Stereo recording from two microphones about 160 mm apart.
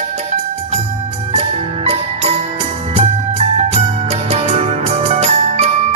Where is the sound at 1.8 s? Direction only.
40° right (ahead or behind).